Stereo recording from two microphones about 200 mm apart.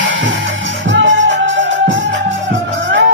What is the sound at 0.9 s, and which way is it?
Music, 70° right (ahead or behind).